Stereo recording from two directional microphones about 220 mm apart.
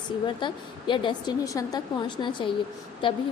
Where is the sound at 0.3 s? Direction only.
20° left (ahead or behind).